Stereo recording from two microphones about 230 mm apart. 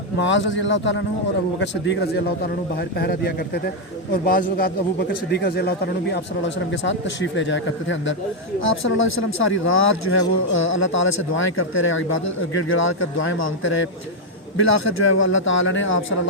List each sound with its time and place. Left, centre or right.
0.2 s a man's voice: left